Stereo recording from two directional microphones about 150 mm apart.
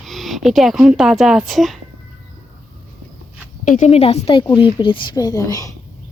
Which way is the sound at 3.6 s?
60° left (ahead or behind).